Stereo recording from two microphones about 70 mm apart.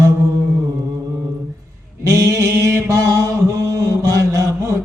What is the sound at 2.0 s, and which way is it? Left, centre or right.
Mantra, right.